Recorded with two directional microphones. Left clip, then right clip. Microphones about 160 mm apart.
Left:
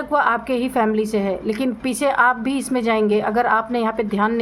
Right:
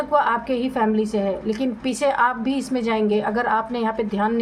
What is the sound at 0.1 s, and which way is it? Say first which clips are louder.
A woman's voice: left 2 dB; 30° left (ahead or behind).